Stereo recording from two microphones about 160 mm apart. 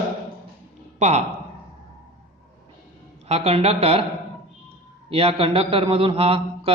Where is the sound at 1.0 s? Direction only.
45° right (ahead or behind).